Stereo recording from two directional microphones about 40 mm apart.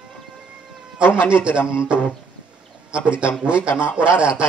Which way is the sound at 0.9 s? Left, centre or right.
Right.